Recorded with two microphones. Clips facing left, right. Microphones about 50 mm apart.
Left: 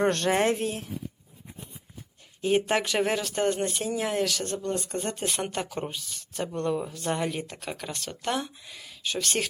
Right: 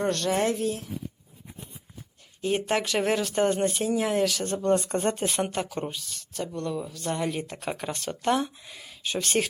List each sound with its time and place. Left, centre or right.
0.0 s a woman's voice: left
2.4 s speech: centre
6.3 s speech: left
7.0 s speech: centre
7.3 s speech: centre
7.6 s speech: centre